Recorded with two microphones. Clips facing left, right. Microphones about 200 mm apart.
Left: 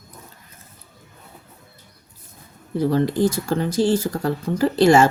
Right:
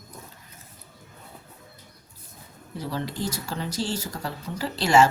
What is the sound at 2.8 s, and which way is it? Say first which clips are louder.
Speech: left 12 dB; 50° left (ahead or behind).